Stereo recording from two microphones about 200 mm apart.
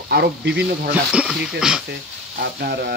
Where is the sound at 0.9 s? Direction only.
5° right (ahead or behind).